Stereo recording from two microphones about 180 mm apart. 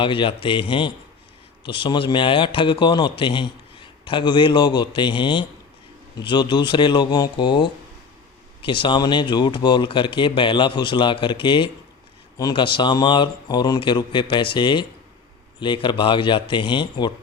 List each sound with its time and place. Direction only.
0.0 s a man's voice: 30° left (ahead or behind)